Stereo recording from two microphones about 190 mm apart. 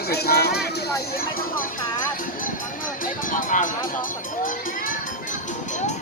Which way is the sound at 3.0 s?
45° left (ahead or behind).